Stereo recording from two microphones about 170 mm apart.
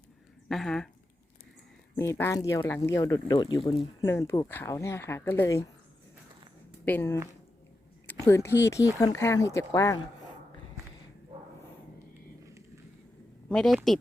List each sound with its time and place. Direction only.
0.4 s speech: centre (ahead or behind)
2.0 s speech: 15° left (ahead or behind)
6.8 s speech: 10° left (ahead or behind)
13.5 s a woman's voice: 5° left (ahead or behind)